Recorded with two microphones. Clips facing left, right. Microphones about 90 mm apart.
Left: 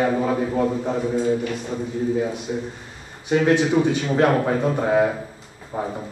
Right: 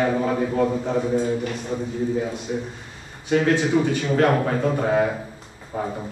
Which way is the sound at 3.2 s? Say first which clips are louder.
Left 2 dB; 15° left (ahead or behind).